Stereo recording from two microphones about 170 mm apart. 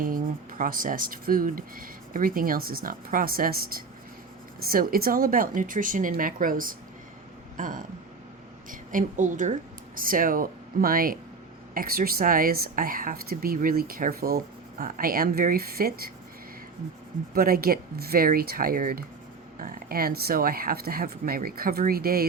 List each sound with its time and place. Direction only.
0.0 s a woman's voice: 55° right (ahead or behind)
17.3 s a woman's voice: 60° right (ahead or behind)